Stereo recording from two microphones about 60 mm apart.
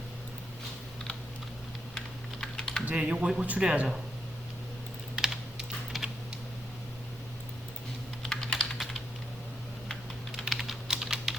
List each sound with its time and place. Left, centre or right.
2.0 s typing: centre
2.8 s speech: right
5.1 s typing: centre
8.2 s typing: centre
10.3 s typing: centre